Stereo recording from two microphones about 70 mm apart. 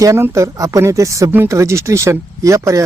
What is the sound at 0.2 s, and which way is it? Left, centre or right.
Speech, right.